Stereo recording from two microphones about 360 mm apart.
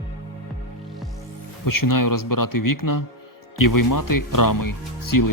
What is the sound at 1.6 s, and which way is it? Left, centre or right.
Speech, left.